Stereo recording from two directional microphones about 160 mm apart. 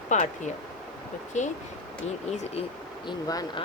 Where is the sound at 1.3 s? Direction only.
45° left (ahead or behind).